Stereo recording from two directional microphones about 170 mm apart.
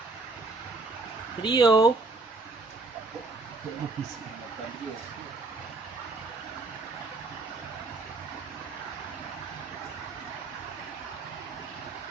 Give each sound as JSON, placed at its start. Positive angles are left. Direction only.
{"t": 1.4, "sound": "speech", "side_deg": 25}